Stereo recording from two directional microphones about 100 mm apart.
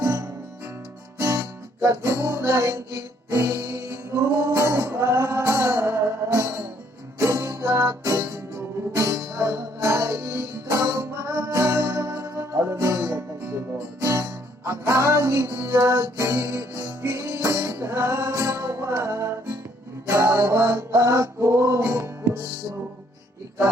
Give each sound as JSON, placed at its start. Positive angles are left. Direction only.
{"t": 0.0, "sound": "music", "side_deg": -30}
{"t": 1.8, "sound": "music", "side_deg": -25}